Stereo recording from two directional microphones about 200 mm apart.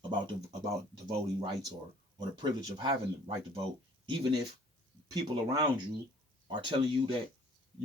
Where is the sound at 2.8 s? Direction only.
25° right (ahead or behind).